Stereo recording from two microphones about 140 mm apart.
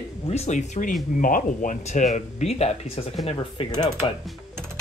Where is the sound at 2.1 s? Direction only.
55° left (ahead or behind).